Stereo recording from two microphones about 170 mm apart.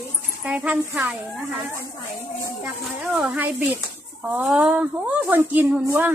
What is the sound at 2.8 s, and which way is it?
Speech, 5° right (ahead or behind).